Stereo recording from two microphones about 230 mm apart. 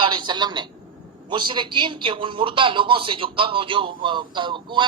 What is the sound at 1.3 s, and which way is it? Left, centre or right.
A man's voice, right.